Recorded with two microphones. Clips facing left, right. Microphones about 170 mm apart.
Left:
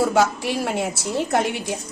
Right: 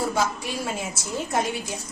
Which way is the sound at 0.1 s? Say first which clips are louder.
Left 6 dB; 75° left (ahead or behind).